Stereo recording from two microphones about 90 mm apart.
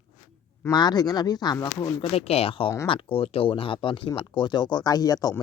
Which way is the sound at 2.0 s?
90° left.